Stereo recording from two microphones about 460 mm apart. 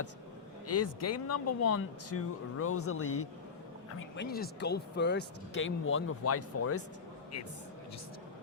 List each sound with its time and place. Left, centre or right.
0.7 s speech: left